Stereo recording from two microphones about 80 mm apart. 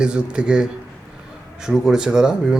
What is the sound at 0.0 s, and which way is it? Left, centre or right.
Speech, centre.